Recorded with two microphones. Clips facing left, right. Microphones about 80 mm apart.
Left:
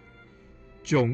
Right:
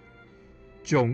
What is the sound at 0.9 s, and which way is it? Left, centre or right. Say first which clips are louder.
Speech: even; centre.